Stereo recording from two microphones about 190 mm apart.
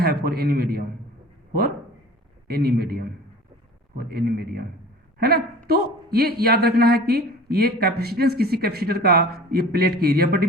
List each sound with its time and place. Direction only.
0.0 s a man's voice: 55° right (ahead or behind)
2.5 s speech: 55° right (ahead or behind)
5.6 s speech: 55° right (ahead or behind)